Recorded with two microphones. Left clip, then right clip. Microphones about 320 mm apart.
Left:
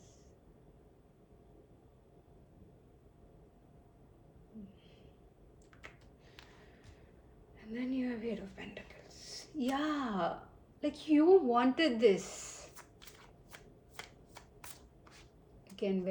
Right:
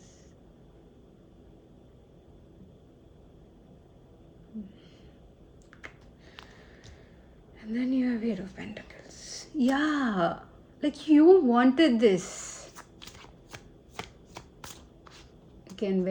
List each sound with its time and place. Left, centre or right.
5.8 s typing: right
7.6 s a sound: right
15.7 s a woman's voice: right